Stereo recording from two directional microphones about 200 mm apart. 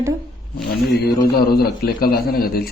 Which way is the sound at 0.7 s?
50° left (ahead or behind).